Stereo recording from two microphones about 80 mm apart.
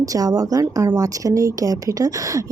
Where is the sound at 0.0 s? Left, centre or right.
Right.